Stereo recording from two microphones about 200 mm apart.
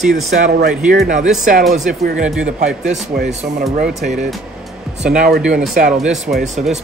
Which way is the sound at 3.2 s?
Centre (ahead or behind).